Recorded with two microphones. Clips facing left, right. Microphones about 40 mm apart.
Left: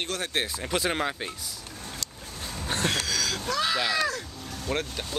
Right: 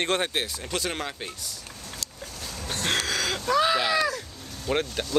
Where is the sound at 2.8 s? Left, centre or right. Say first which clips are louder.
Right 3 dB; right.